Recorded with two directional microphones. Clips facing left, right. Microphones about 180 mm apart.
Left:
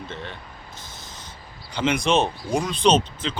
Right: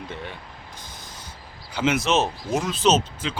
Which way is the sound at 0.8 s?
10° right (ahead or behind).